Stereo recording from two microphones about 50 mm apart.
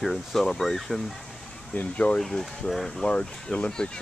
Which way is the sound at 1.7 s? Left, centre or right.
Left.